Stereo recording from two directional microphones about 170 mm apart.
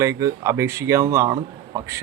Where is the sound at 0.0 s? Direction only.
20° right (ahead or behind).